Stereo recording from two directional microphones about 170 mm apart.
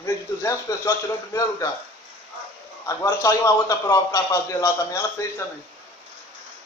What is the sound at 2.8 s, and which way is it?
A man's voice, 20° left (ahead or behind).